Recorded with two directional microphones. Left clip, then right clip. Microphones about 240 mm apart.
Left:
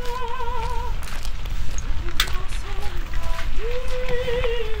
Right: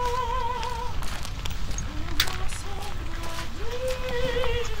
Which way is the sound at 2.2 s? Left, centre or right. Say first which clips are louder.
Left 2 dB; centre.